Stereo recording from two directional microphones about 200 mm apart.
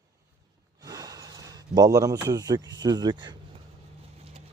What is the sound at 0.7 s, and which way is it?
Speech, 20° right (ahead or behind).